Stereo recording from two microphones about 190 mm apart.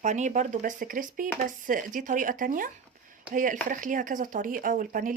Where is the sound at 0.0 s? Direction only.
40° right (ahead or behind).